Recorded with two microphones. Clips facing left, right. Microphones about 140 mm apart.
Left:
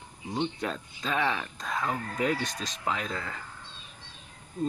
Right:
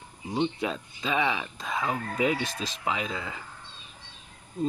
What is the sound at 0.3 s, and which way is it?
Speech, 10° right (ahead or behind).